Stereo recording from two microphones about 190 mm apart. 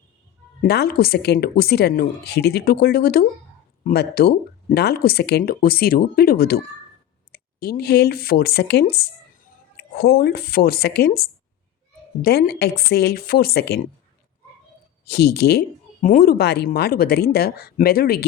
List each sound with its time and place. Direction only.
0.6 s speech: 55° left (ahead or behind)
15.0 s speech: 60° left (ahead or behind)
16.0 s speech: 45° left (ahead or behind)